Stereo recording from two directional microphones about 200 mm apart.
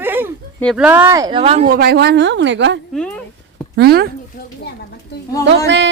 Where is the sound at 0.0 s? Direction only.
10° right (ahead or behind).